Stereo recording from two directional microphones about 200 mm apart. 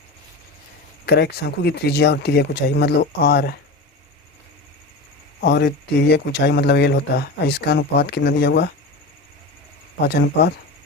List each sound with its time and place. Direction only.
1.0 s speech: 55° left (ahead or behind)
5.4 s speech: 55° left (ahead or behind)
10.0 s speech: 55° left (ahead or behind)